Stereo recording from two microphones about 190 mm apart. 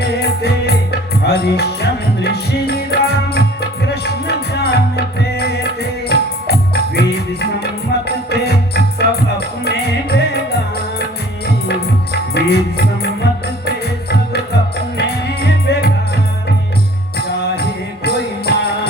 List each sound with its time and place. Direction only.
0.2 s music: 60° left (ahead or behind)
11.4 s music: 60° left (ahead or behind)
14.9 s music: 60° left (ahead or behind)
17.5 s music: 60° left (ahead or behind)